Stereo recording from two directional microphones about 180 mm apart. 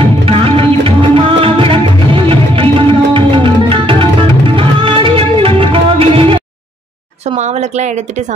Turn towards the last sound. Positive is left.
turn(degrees=-30)  # may be behind; listen again after turning